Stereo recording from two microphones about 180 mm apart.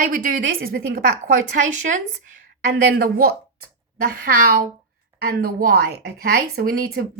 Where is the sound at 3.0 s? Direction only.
55° right (ahead or behind).